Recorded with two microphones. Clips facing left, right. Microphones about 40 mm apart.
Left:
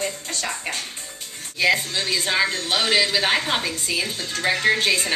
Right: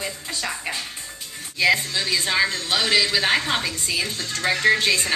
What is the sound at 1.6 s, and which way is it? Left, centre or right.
A man's voice, centre.